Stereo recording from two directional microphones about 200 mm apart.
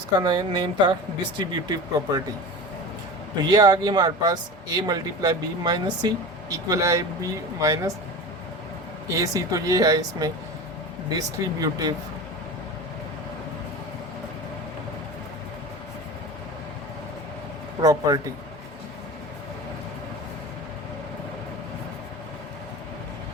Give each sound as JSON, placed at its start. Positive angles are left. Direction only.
{"t": 0.2, "sound": "speech", "side_deg": -20}
{"t": 3.5, "sound": "speech", "side_deg": -20}
{"t": 9.0, "sound": "speech", "side_deg": -15}
{"t": 17.7, "sound": "speech", "side_deg": -20}